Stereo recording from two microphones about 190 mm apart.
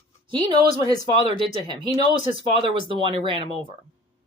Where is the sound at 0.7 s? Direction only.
50° right (ahead or behind).